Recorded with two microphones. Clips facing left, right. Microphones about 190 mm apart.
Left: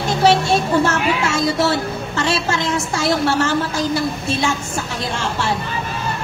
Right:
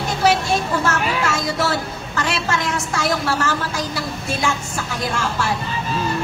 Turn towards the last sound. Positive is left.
turn(degrees=25)  # may be behind; listen again after turning